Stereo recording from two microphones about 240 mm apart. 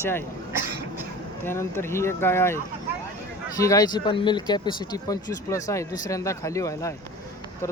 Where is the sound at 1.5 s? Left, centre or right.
Centre.